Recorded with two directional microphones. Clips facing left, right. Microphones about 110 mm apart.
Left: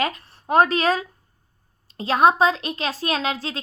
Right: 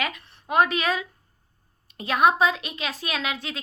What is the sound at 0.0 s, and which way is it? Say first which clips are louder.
A woman's voice: left 5 dB; 35° left (ahead or behind).